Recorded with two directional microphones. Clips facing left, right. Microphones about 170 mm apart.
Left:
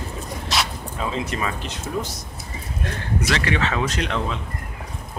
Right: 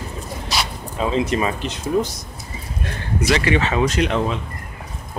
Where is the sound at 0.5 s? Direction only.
Centre (ahead or behind).